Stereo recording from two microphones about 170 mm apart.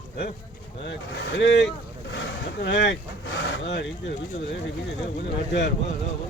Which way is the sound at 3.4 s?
90° left.